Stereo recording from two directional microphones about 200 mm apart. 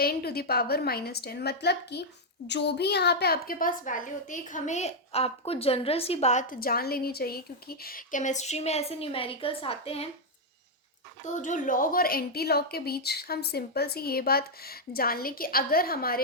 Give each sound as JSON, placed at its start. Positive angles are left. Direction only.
{"t": 0.0, "sound": "a woman's voice", "side_deg": 50}
{"t": 11.3, "sound": "a woman's voice", "side_deg": 40}